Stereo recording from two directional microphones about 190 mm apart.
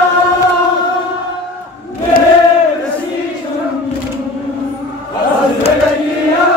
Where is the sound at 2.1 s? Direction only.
50° left (ahead or behind).